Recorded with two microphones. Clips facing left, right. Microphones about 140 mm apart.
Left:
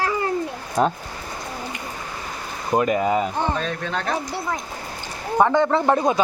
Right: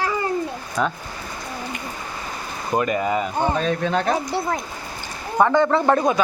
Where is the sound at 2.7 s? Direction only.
5° left (ahead or behind).